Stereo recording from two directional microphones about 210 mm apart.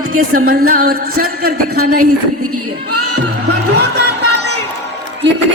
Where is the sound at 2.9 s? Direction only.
90° right.